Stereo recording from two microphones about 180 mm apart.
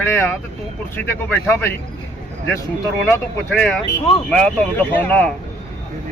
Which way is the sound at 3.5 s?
5° left (ahead or behind).